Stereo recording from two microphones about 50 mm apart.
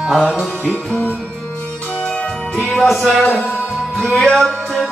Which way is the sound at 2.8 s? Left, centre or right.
Centre.